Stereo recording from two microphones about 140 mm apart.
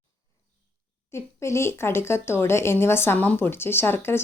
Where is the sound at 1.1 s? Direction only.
20° left (ahead or behind).